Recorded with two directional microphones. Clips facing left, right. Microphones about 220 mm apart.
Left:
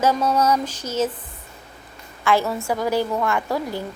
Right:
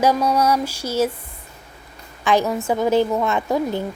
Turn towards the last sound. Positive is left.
turn(degrees=-20)  # may be behind; listen again after turning